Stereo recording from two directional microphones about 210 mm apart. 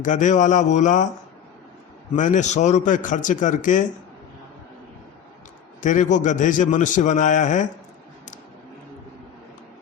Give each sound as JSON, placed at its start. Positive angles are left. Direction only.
{"t": 0.0, "sound": "a man's voice", "side_deg": 35}
{"t": 2.1, "sound": "a man's voice", "side_deg": 35}
{"t": 5.8, "sound": "a man's voice", "side_deg": 35}